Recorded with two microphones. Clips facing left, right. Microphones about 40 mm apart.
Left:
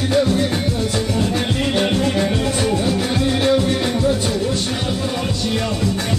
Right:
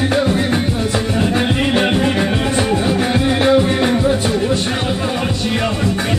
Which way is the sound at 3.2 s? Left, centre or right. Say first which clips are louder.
Right 3 dB; right.